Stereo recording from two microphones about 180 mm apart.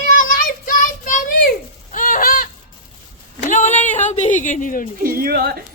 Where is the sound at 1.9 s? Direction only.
45° left (ahead or behind).